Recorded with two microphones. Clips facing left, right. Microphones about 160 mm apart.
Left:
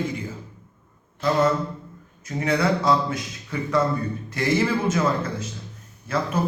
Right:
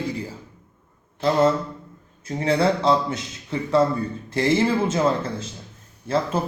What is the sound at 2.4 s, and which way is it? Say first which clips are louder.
A man's voice: right 2 dB; 30° right (ahead or behind).